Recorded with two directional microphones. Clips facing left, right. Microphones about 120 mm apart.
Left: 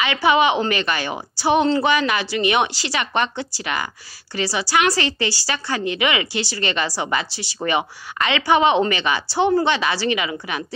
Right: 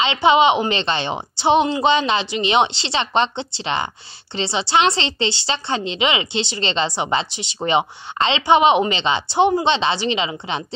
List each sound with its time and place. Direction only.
0.0 s a woman's voice: 25° right (ahead or behind)